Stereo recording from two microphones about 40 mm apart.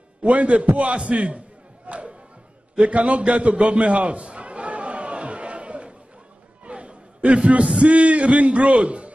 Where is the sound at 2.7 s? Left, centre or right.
Right.